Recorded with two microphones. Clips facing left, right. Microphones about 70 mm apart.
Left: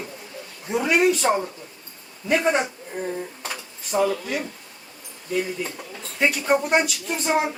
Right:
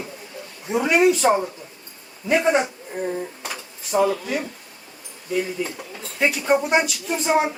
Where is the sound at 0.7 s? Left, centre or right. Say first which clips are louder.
Right 2 dB; centre.